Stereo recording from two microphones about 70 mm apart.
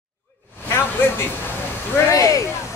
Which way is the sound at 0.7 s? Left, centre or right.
Left.